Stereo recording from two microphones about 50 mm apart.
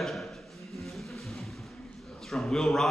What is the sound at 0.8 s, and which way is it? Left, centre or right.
Music, centre.